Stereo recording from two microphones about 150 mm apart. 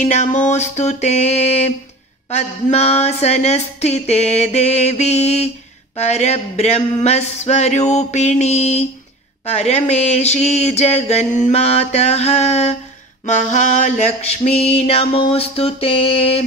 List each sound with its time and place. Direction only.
0.0 s speech: 55° left (ahead or behind)
13.2 s mantra: 55° left (ahead or behind)